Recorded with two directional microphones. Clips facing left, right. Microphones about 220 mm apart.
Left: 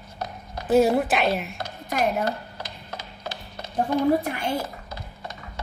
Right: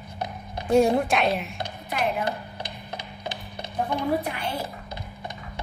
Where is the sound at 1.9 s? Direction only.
45° left (ahead or behind).